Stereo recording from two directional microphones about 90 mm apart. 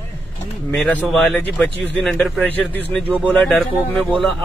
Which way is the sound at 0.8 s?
10° left (ahead or behind).